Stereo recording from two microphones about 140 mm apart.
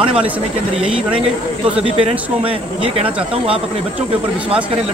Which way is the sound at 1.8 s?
45° right (ahead or behind).